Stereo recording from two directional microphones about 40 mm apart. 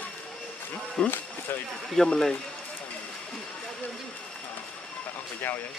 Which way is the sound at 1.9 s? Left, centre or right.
Centre.